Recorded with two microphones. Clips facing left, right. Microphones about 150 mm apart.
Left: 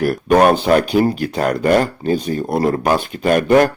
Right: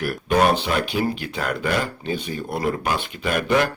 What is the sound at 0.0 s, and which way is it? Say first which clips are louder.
Speech: left 7 dB; 45° left (ahead or behind).